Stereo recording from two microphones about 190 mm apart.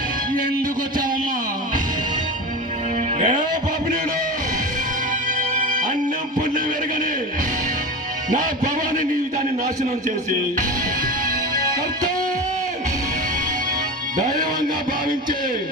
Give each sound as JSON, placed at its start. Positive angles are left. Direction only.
{"t": 3.2, "sound": "music", "side_deg": -40}
{"t": 5.4, "sound": "music", "side_deg": -45}
{"t": 8.3, "sound": "music", "side_deg": -45}
{"t": 14.2, "sound": "speech", "side_deg": -40}